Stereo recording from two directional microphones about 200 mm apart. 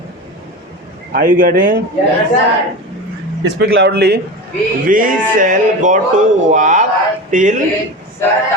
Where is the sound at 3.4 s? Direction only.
55° right (ahead or behind).